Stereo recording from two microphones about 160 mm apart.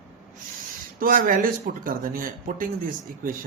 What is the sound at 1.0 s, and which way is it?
Speech, 60° right (ahead or behind).